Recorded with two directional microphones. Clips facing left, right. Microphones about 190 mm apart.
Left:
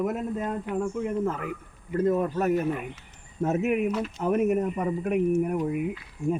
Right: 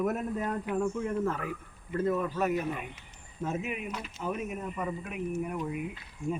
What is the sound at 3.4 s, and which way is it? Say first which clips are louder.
Speech: left 10 dB; 70° left (ahead or behind).